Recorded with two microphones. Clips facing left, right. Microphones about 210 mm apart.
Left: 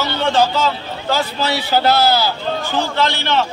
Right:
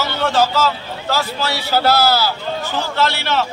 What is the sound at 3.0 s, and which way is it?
Speech, 5° right (ahead or behind).